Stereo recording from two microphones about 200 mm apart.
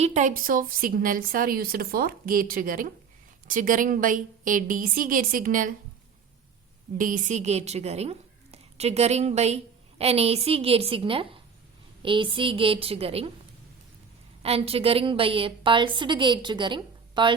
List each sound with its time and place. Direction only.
0.0 s a woman's voice: 35° right (ahead or behind)
6.9 s a woman's voice: 40° right (ahead or behind)
14.4 s a woman's voice: 30° right (ahead or behind)